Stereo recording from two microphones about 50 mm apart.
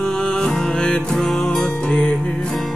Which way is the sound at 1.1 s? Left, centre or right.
Centre.